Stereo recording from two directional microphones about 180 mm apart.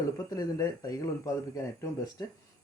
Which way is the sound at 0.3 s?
20° left (ahead or behind).